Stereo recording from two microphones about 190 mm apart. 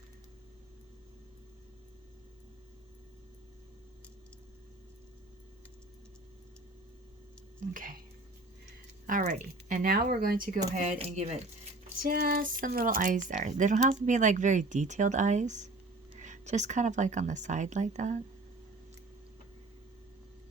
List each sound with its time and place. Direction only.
7.7 s speech: 45° right (ahead or behind)
9.0 s speech: 45° right (ahead or behind)
10.8 s speech: 35° right (ahead or behind)
12.0 s speech: 50° right (ahead or behind)